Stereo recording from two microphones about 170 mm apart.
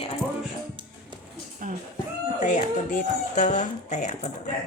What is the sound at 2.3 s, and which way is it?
Speech, 50° left (ahead or behind).